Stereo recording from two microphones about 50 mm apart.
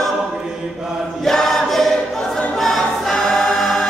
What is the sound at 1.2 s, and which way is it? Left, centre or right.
Choir, centre.